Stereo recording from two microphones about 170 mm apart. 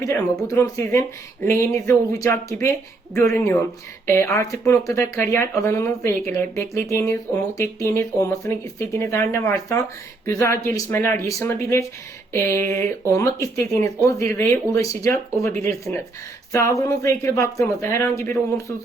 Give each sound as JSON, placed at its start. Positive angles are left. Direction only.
{"t": 0.0, "sound": "speech", "side_deg": 15}
{"t": 15.9, "sound": "speech", "side_deg": 10}
{"t": 16.5, "sound": "speech", "side_deg": 20}